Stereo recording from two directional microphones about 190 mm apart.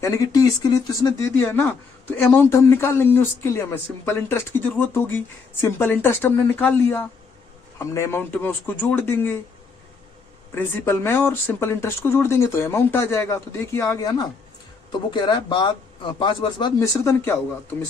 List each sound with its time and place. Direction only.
0.0 s speech: 15° left (ahead or behind)
10.5 s speech: 10° left (ahead or behind)